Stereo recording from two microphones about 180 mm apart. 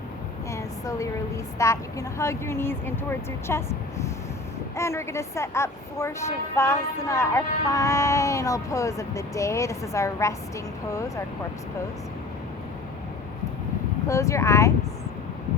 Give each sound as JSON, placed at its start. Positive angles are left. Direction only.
{"t": 0.5, "sound": "a sound", "side_deg": 15}
{"t": 1.5, "sound": "a woman's voice", "side_deg": 15}
{"t": 14.1, "sound": "a woman's voice", "side_deg": 15}